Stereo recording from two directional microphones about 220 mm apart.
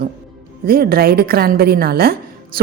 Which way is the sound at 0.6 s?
45° right (ahead or behind).